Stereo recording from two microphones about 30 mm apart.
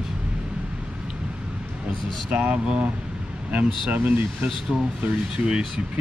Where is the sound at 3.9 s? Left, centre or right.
Right.